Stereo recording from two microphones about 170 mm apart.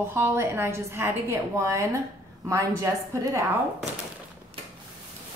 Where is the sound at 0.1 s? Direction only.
15° right (ahead or behind).